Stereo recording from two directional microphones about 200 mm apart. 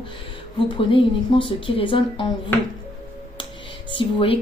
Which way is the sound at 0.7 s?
25° left (ahead or behind).